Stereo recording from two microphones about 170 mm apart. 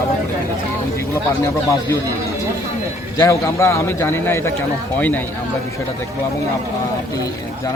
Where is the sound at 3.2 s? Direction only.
20° left (ahead or behind).